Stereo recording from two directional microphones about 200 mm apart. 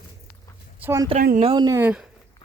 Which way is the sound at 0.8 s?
10° right (ahead or behind).